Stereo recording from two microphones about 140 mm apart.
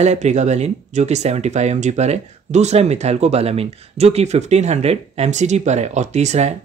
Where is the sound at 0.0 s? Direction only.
55° right (ahead or behind).